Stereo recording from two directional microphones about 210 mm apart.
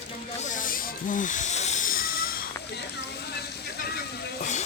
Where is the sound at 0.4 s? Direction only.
40° left (ahead or behind).